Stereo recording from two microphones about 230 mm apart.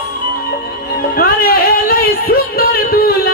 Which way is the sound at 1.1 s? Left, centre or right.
Left.